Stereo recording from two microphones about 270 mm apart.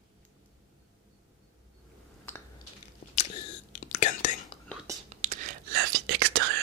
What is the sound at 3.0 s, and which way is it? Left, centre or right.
Chewing, left.